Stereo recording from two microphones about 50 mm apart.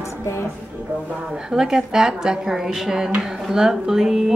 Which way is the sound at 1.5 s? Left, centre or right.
Centre.